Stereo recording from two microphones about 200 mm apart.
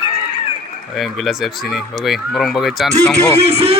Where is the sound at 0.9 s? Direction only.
Centre (ahead or behind).